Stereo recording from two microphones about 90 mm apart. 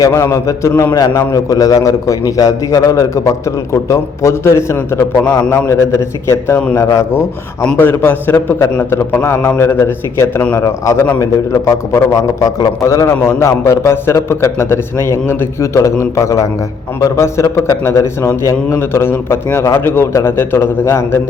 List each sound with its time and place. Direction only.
0.1 s a man's voice: 30° left (ahead or behind)
7.6 s a man's voice: 20° left (ahead or behind)